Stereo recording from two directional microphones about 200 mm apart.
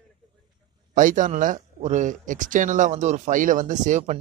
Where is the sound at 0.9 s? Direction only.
40° right (ahead or behind).